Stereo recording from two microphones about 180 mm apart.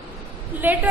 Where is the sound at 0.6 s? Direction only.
10° right (ahead or behind).